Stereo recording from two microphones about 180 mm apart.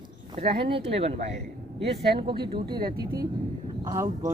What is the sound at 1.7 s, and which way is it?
Speech, 70° right (ahead or behind).